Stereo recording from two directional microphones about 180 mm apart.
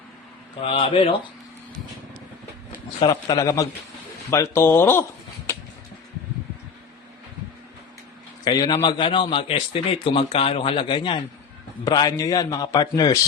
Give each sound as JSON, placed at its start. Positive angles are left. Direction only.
{"t": 0.6, "sound": "speech", "side_deg": 30}
{"t": 3.0, "sound": "a man's voice", "side_deg": 20}
{"t": 8.4, "sound": "a man's voice", "side_deg": 20}